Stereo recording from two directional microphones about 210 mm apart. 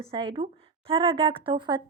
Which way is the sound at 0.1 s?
25° right (ahead or behind).